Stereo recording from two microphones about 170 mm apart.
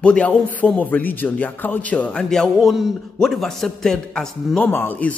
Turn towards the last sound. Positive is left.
turn(degrees=10)  # may be behind; listen again after turning